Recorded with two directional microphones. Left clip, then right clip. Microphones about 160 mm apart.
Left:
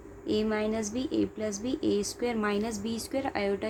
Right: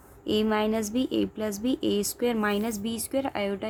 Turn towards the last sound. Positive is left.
turn(degrees=-35)  # may be behind; listen again after turning